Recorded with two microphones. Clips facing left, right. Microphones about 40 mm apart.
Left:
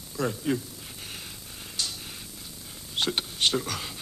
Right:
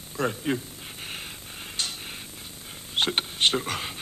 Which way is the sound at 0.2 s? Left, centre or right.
Right.